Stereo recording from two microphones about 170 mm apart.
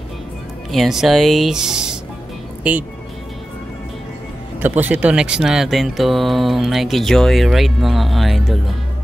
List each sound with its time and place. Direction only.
0.7 s speech: centre (ahead or behind)
4.6 s speech: 10° right (ahead or behind)